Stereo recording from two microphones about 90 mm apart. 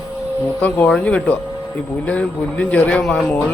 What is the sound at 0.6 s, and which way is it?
A man's voice, 15° left (ahead or behind).